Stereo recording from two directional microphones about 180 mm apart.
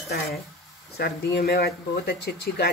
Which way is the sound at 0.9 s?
60° left (ahead or behind).